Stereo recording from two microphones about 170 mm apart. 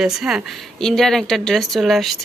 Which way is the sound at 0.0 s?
5° right (ahead or behind).